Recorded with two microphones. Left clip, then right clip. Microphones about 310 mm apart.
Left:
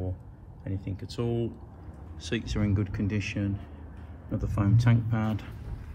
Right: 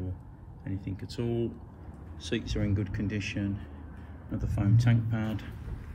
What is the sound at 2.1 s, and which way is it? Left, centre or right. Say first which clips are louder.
Speech: left 1 dB; centre.